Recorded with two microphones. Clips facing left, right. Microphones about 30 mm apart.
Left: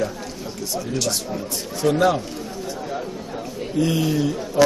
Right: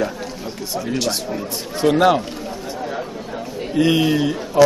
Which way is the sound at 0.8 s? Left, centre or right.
Right.